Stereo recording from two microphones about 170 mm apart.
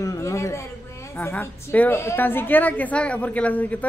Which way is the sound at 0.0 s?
20° left (ahead or behind).